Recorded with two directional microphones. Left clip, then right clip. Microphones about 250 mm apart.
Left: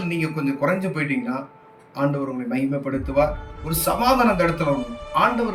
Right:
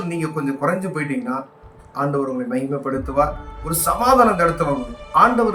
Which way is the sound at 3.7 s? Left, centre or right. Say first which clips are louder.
Right 3 dB; right.